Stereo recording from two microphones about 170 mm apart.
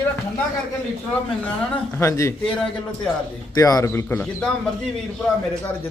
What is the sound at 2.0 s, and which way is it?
Speech, 15° left (ahead or behind).